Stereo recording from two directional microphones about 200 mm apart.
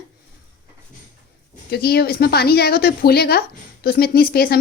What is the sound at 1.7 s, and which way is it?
A woman's voice, 50° left (ahead or behind).